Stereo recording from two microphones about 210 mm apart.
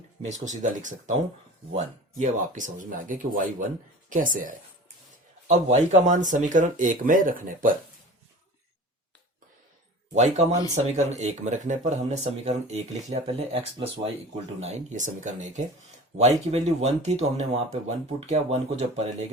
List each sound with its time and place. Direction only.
0.3 s speech: 35° right (ahead or behind)
10.2 s speech: 35° right (ahead or behind)